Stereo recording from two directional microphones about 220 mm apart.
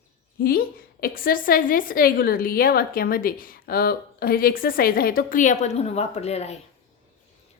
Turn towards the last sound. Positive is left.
turn(degrees=30)  # may be behind; listen again after turning